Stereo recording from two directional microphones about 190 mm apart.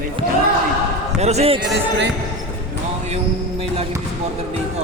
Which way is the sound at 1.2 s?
35° right (ahead or behind).